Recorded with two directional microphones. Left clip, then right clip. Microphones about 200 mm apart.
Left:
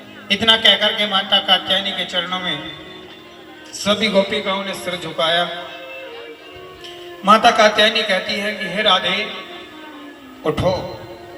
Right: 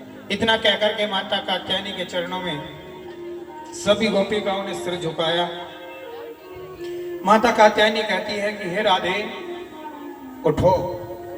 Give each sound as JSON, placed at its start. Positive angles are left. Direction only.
{"t": 0.3, "sound": "a man's voice", "side_deg": -60}
{"t": 3.8, "sound": "a man's voice", "side_deg": -60}
{"t": 6.8, "sound": "a man's voice", "side_deg": -60}
{"t": 10.5, "sound": "a man's voice", "side_deg": -60}